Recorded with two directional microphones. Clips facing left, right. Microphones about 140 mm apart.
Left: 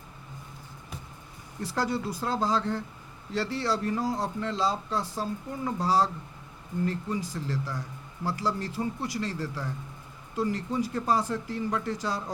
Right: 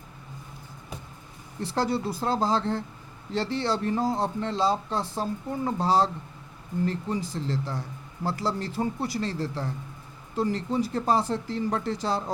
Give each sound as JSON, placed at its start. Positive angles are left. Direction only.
{"t": 1.7, "sound": "speech", "side_deg": -30}